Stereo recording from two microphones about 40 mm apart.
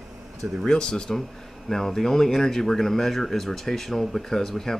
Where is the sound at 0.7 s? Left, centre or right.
Left.